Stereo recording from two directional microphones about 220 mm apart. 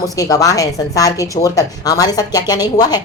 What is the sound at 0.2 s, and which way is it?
A woman's voice, 15° left (ahead or behind).